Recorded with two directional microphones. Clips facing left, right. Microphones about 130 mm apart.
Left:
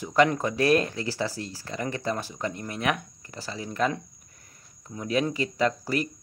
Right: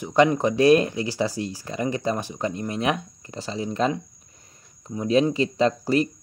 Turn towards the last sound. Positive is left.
turn(degrees=-25)  # may be behind; listen again after turning